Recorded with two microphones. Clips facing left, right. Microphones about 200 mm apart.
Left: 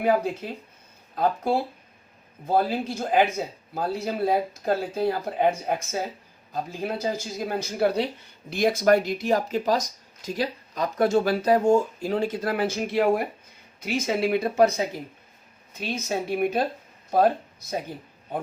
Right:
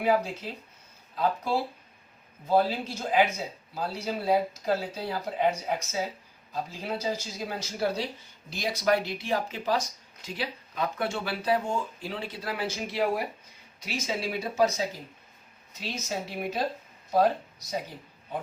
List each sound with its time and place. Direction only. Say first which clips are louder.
1.1 s speech: left 4 dB; 55° left (ahead or behind)